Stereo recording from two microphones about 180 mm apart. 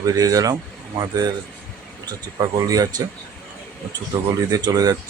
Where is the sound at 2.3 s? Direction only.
20° right (ahead or behind).